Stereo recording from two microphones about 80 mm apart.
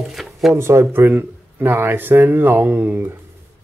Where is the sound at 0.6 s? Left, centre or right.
Right.